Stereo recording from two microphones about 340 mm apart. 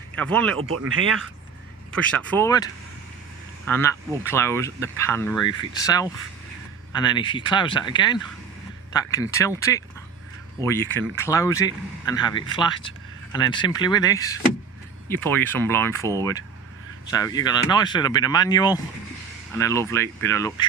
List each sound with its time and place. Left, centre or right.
0.2 s speech: centre
0.7 s speech: right
1.9 s speech: centre
3.7 s speech: centre